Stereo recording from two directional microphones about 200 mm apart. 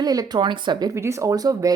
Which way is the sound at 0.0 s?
20° right (ahead or behind).